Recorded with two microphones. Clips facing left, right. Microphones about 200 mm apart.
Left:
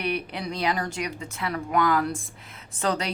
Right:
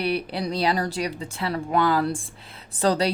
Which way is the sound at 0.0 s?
35° right (ahead or behind).